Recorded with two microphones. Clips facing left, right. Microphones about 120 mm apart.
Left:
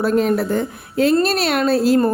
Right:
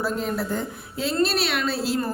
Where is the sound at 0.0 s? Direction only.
70° left (ahead or behind).